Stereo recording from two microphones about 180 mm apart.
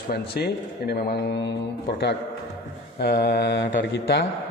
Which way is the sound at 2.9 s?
60° left (ahead or behind).